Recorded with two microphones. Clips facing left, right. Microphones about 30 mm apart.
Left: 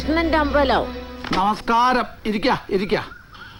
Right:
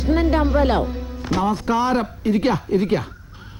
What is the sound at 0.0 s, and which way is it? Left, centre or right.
Speech, left.